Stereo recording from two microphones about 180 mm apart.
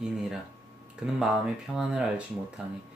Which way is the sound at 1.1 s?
5° right (ahead or behind).